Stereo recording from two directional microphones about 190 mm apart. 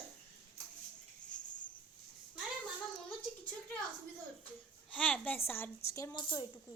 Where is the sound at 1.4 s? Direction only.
25° left (ahead or behind).